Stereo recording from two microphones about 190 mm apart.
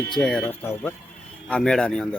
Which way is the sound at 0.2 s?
5° left (ahead or behind).